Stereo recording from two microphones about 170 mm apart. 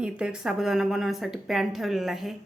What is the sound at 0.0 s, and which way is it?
A woman's voice, 5° right (ahead or behind).